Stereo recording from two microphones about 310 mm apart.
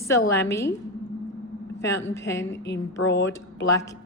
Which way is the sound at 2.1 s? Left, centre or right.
Centre.